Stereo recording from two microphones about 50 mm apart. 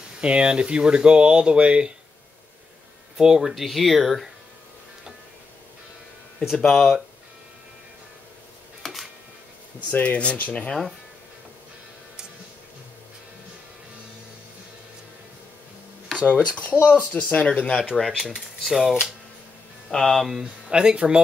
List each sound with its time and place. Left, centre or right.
0.2 s speech: right
3.2 s speech: centre
6.5 s speech: centre
8.8 s a sound: centre
9.8 s speech: left
16.3 s speech: left
17.9 s speech: centre
19.9 s speech: centre
20.2 s speech: centre
20.7 s speech: centre